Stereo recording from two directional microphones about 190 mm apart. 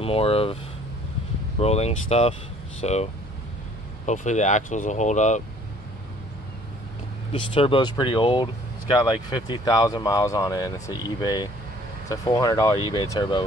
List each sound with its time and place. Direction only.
0.0 s speech: 30° left (ahead or behind)
1.6 s speech: 35° left (ahead or behind)
7.3 s speech: 25° left (ahead or behind)